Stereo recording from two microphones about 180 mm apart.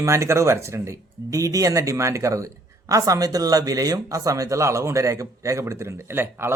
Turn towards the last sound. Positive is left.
turn(degrees=-15)  # may be behind; listen again after turning